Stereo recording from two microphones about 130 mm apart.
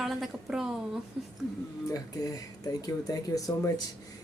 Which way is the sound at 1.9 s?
30° left (ahead or behind).